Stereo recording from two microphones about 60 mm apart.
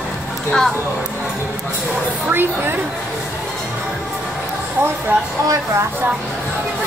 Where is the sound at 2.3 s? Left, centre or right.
Right.